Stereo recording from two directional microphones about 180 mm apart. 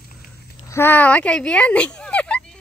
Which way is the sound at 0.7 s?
10° left (ahead or behind).